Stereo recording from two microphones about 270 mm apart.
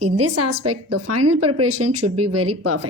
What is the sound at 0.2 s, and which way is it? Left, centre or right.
A woman's voice, right.